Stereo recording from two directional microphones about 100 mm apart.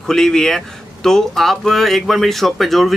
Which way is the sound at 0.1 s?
5° left (ahead or behind).